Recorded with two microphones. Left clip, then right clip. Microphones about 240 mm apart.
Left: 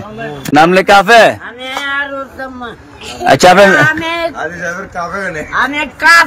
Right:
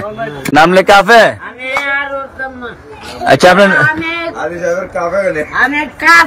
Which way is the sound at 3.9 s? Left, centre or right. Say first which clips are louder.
Left 1 dB; centre.